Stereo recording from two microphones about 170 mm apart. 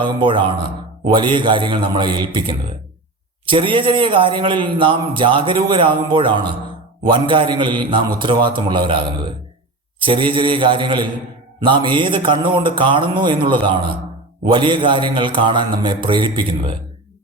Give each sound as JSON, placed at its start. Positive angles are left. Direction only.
{"t": 0.0, "sound": "a man's voice", "side_deg": -30}